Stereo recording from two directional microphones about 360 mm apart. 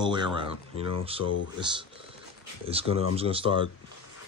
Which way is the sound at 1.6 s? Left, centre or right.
Centre.